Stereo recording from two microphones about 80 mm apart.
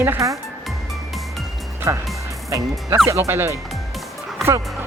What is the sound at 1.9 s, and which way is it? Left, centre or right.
Speech, right.